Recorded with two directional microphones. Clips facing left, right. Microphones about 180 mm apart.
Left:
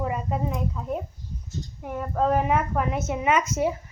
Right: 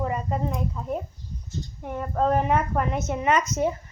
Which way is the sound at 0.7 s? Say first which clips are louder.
Even; centre (ahead or behind).